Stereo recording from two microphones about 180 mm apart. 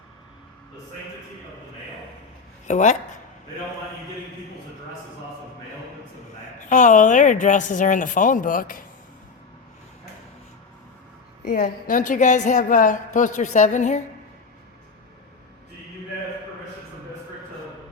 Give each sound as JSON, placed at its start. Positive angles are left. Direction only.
{"t": 2.6, "sound": "speech", "side_deg": 40}
{"t": 6.6, "sound": "a woman's voice", "side_deg": 45}
{"t": 11.4, "sound": "a woman's voice", "side_deg": 50}